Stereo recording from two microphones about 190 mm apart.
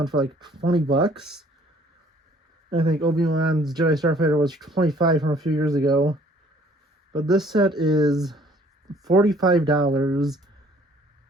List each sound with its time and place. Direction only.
0.0 s speech: 20° right (ahead or behind)
1.1 s speech: centre (ahead or behind)
2.6 s speech: 25° right (ahead or behind)
4.5 s speech: centre (ahead or behind)
4.8 s speech: 20° right (ahead or behind)
7.1 s speech: 25° right (ahead or behind)
10.2 s speech: centre (ahead or behind)